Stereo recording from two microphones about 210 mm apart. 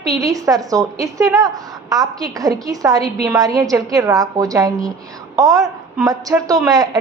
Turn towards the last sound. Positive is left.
turn(degrees=-20)  # may be behind; listen again after turning